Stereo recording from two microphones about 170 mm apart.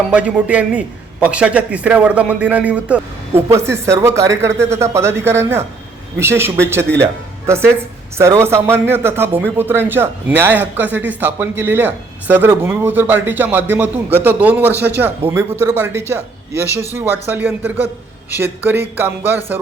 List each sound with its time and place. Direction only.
0.1 s speech: 5° right (ahead or behind)